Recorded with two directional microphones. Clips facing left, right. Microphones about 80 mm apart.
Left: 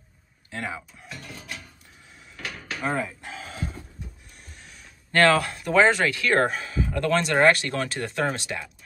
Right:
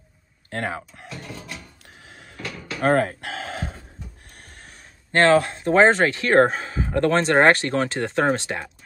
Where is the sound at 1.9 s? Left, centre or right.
Right.